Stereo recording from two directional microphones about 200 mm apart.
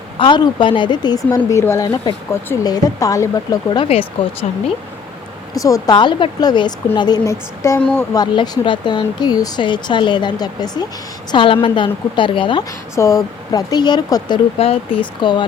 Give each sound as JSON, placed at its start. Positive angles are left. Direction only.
{"t": 0.2, "sound": "speech", "side_deg": 25}
{"t": 5.5, "sound": "speech", "side_deg": 15}
{"t": 8.1, "sound": "speech", "side_deg": 20}
{"t": 13.0, "sound": "speech", "side_deg": 15}